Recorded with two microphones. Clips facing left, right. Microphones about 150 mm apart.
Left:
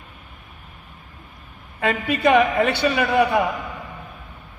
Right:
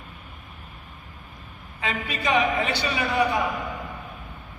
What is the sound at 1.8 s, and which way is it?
A man's voice, 55° left (ahead or behind).